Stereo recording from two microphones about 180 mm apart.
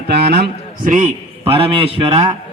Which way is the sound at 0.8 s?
40° right (ahead or behind).